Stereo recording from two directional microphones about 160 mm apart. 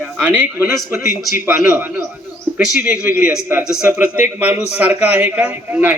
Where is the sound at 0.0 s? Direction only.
10° right (ahead or behind).